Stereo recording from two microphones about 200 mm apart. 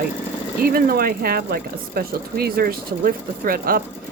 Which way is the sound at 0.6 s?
50° right (ahead or behind).